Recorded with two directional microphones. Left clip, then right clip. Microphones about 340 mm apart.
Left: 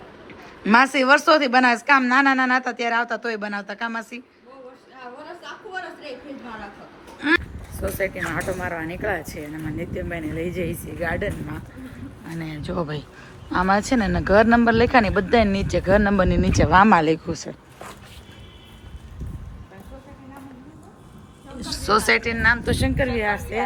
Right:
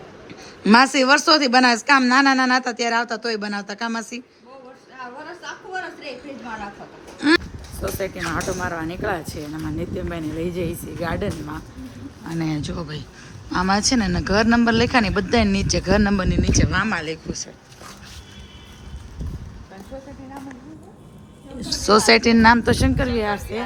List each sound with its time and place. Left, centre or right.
0.6 s speech: centre
7.2 s speech: centre
12.6 s speech: centre
21.5 s speech: centre